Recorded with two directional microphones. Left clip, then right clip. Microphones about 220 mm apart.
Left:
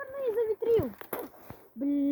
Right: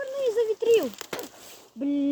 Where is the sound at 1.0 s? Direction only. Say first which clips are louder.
Right 4 dB; 45° right (ahead or behind).